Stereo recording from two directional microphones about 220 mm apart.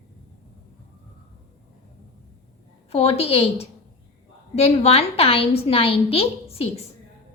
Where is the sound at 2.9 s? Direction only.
25° left (ahead or behind).